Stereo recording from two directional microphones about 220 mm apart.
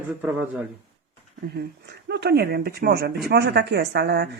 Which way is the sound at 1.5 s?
50° right (ahead or behind).